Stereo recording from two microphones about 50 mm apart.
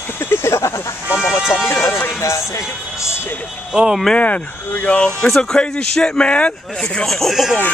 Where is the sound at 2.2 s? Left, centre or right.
Left.